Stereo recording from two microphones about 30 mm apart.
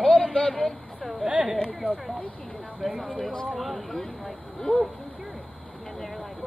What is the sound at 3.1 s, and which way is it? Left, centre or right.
Speech, left.